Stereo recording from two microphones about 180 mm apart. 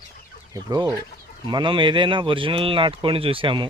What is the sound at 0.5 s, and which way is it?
Chicken, 20° right (ahead or behind).